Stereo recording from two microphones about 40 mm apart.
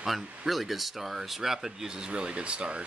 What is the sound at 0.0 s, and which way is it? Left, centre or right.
Speech, centre.